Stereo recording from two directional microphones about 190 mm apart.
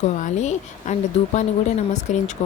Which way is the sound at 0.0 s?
40° left (ahead or behind).